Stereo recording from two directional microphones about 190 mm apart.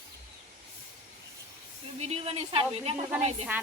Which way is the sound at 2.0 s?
35° right (ahead or behind).